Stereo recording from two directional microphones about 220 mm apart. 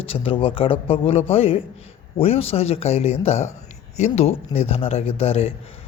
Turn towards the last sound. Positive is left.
turn(degrees=25)  # may be behind; listen again after turning